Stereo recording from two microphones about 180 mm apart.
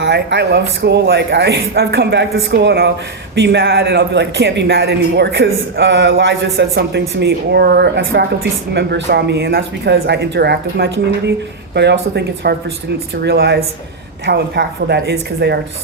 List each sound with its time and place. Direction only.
0.0 s a man's voice: 70° right (ahead or behind)